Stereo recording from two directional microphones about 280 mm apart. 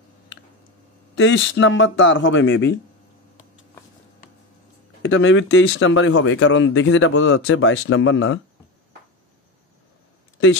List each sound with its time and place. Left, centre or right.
1.1 s speech: left
5.0 s speech: left
10.4 s speech: left